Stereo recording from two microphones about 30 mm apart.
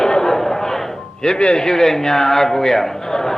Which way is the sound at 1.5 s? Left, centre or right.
Centre.